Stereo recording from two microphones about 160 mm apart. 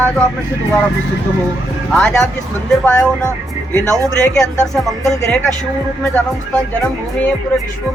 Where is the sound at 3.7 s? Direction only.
20° right (ahead or behind).